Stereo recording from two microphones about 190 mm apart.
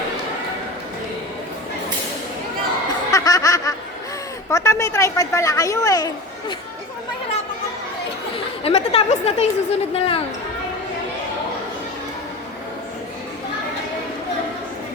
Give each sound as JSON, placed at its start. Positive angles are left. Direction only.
{"t": 3.1, "sound": "snicker", "side_deg": 20}
{"t": 4.5, "sound": "a woman's voice", "side_deg": 15}
{"t": 8.6, "sound": "a woman's voice", "side_deg": 30}